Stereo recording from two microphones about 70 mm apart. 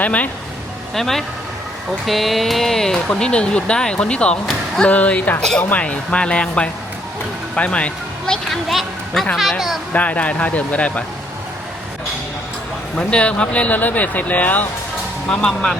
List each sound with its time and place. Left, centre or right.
0.0 s speech: left
0.9 s speech: centre; by 5.4 s left
5.4 s speech: centre
5.6 s speech: centre
7.5 s speech: centre
9.3 s speech: centre
9.9 s speech: left
13.0 s speech: centre
15.3 s speech: centre